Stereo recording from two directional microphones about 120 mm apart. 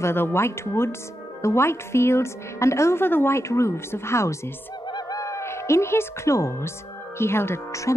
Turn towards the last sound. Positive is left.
turn(degrees=25)  # may be behind; listen again after turning